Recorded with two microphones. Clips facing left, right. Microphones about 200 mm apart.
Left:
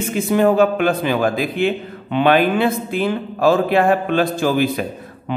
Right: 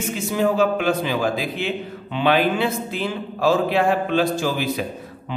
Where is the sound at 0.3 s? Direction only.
55° left (ahead or behind).